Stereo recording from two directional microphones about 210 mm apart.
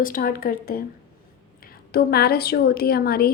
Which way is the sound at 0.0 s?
40° left (ahead or behind).